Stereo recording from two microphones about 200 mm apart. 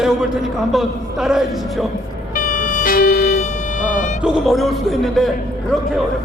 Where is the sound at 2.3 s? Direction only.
40° left (ahead or behind); by 3.4 s 55° left (ahead or behind).